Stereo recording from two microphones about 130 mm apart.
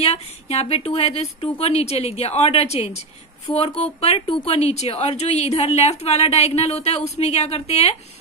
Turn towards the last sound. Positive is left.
turn(degrees=55)  # may be behind; listen again after turning